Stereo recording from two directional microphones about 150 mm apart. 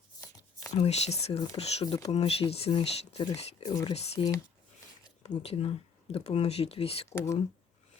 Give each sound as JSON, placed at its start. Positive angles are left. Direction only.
{"t": 0.7, "sound": "speech", "side_deg": 50}
{"t": 3.7, "sound": "speech", "side_deg": 25}
{"t": 3.9, "sound": "speech", "side_deg": 45}
{"t": 5.4, "sound": "speech", "side_deg": 40}